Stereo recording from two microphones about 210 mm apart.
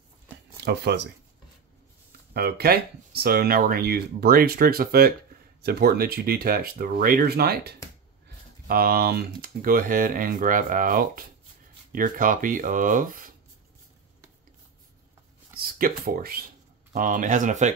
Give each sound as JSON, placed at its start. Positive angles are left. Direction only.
{"t": 0.7, "sound": "speech", "side_deg": -50}
{"t": 2.3, "sound": "speech", "side_deg": -50}
{"t": 16.1, "sound": "speech", "side_deg": -45}